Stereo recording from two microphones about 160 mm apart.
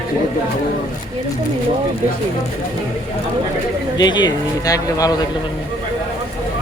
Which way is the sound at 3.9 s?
25° left (ahead or behind).